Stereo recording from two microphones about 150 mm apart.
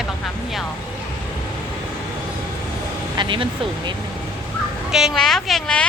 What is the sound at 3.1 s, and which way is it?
Speech, 35° right (ahead or behind).